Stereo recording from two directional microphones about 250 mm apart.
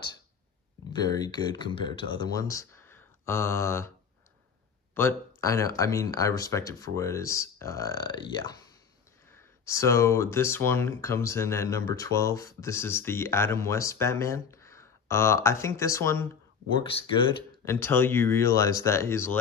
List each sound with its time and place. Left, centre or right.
1.0 s speech: centre
4.9 s speech: centre
16.9 s speech: left
17.6 s speech: centre